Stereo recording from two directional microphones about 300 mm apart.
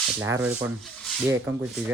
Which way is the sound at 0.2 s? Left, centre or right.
Centre.